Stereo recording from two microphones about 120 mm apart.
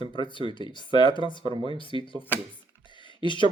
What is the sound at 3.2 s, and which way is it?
Speech, 40° left (ahead or behind).